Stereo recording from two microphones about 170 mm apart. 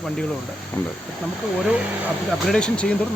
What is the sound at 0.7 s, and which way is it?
Speech, 15° left (ahead or behind).